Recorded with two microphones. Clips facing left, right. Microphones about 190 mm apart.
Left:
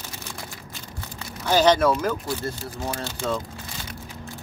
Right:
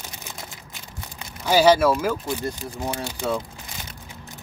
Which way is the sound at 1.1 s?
10° right (ahead or behind).